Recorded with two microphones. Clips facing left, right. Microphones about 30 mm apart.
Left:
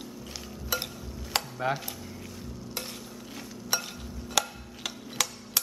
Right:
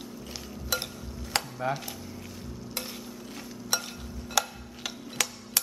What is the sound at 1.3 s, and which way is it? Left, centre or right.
Chopping, centre.